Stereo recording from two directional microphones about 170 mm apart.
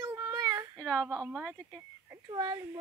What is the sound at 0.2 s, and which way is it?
Child singing, 15° right (ahead or behind).